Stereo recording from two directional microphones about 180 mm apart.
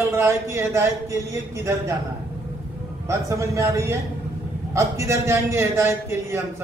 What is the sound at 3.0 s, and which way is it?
A man's voice, 15° right (ahead or behind).